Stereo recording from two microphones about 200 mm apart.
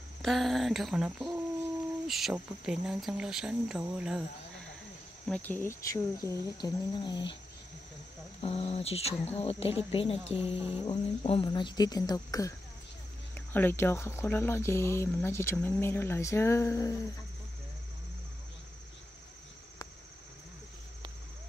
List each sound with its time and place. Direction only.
0.2 s speech: centre (ahead or behind)
5.3 s speech: 10° left (ahead or behind)
8.4 s speech: 30° left (ahead or behind)